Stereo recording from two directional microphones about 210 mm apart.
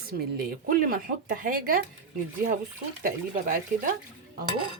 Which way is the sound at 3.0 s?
40° right (ahead or behind).